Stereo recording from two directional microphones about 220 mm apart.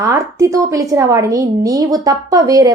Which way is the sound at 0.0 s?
15° right (ahead or behind).